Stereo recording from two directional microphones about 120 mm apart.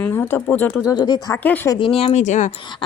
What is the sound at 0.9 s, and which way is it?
Speech, 35° left (ahead or behind).